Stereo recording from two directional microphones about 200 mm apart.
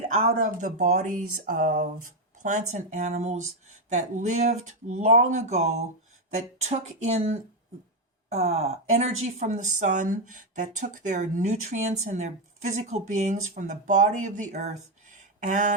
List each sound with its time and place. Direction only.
0.1 s speech: 40° right (ahead or behind)